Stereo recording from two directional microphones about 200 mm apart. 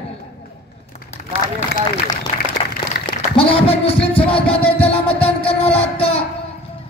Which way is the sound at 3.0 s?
25° left (ahead or behind).